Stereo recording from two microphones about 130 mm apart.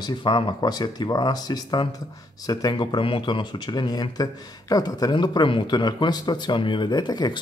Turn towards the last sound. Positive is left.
turn(degrees=35)  # may be behind; listen again after turning